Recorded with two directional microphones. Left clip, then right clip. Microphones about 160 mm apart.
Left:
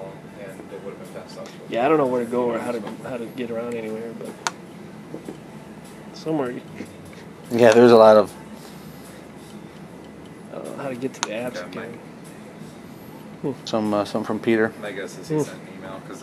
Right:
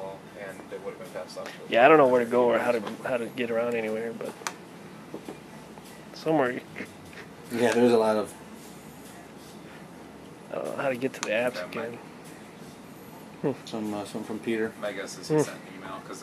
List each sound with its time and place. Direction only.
1.4 s speech: 10° right (ahead or behind)
6.2 s speech: 15° right (ahead or behind)
7.6 s speech: 10° left (ahead or behind)
10.5 s a sound: 10° right (ahead or behind)
11.2 s speech: 10° right (ahead or behind)
13.7 s speech: 10° left (ahead or behind)
14.8 s speech: 10° right (ahead or behind)